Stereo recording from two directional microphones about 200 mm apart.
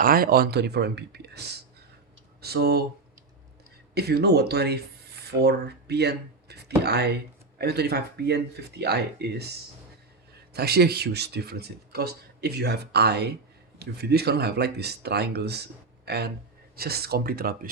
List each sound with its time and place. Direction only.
0.0 s speech: 45° right (ahead or behind)
3.9 s speech: 55° right (ahead or behind)
10.5 s speech: 55° right (ahead or behind)